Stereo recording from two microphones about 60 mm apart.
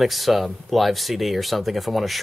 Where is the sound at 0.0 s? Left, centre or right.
Centre.